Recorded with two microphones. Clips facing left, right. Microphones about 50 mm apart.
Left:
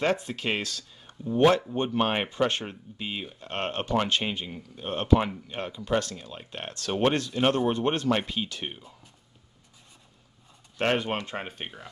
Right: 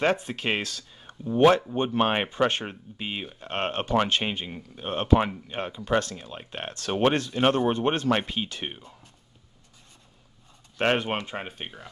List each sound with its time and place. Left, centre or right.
0.0 s speech: right
5.9 s speech: right
10.8 s speech: right
11.1 s speech: centre